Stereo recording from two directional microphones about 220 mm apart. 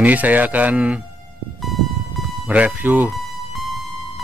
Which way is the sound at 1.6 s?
Centre (ahead or behind).